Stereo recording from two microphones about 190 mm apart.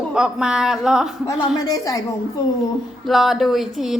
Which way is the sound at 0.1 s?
5° right (ahead or behind).